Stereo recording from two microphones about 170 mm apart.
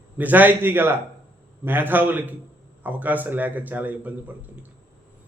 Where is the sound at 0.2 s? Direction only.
10° right (ahead or behind).